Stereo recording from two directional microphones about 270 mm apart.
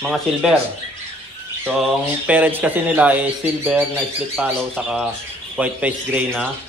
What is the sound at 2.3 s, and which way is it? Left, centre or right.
Speech, centre.